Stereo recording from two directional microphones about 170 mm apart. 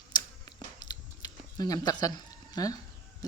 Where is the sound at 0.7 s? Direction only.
25° left (ahead or behind).